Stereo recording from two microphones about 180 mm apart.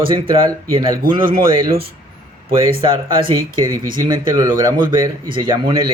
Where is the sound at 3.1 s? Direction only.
30° right (ahead or behind).